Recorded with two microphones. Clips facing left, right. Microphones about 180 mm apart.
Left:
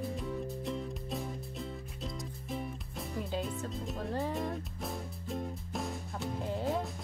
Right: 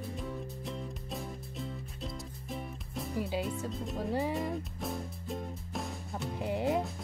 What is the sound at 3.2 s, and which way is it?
Speech, 5° right (ahead or behind).